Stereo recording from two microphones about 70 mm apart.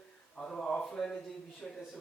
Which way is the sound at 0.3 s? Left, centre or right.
Centre.